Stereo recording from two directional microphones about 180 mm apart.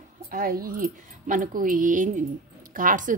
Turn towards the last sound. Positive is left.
turn(degrees=-50)  # may be behind; listen again after turning